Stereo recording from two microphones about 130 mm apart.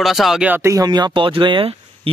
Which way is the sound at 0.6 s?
25° right (ahead or behind).